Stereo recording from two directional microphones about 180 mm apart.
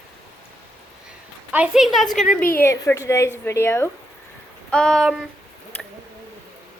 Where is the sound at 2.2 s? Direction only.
50° left (ahead or behind).